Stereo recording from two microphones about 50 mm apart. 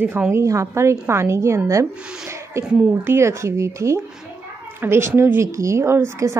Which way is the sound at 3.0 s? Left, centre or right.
Right.